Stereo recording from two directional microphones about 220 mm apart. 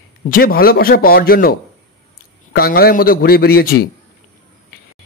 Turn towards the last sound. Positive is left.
turn(degrees=45)  # may be behind; listen again after turning